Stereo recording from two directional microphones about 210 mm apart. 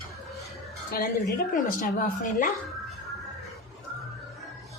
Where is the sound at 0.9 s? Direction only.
45° left (ahead or behind).